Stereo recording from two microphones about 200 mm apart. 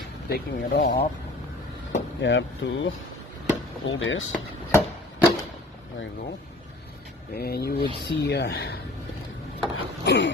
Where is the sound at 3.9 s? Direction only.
75° left (ahead or behind).